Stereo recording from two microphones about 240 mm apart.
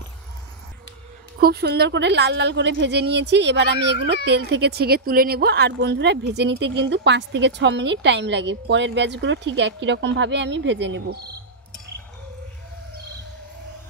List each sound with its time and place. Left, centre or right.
1.4 s a woman's voice: right